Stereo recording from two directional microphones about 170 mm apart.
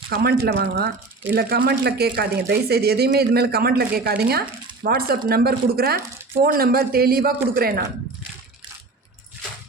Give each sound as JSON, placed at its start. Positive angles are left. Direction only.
{"t": 0.1, "sound": "a man's voice", "side_deg": -70}